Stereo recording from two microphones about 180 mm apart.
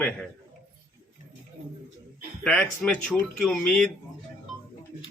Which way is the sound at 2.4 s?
5° left (ahead or behind).